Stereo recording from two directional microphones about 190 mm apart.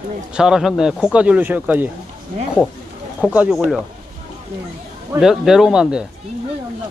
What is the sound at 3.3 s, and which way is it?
Speech, 5° right (ahead or behind).